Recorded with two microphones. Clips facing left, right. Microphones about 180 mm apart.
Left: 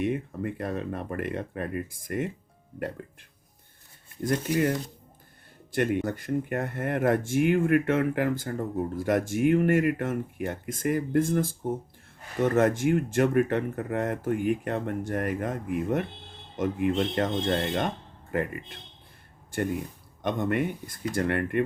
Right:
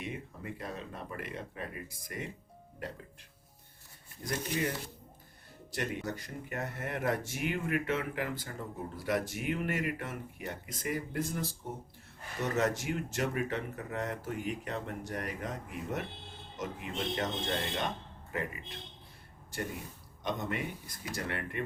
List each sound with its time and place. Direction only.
0.0 s speech: 55° left (ahead or behind)
5.7 s speech: 55° left (ahead or behind)